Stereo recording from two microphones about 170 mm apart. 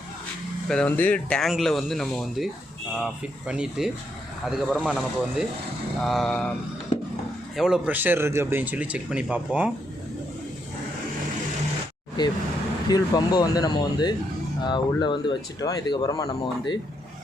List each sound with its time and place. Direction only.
0.7 s speech: 5° left (ahead or behind)
7.5 s a man's voice: 5° right (ahead or behind)
12.9 s speech: 25° left (ahead or behind)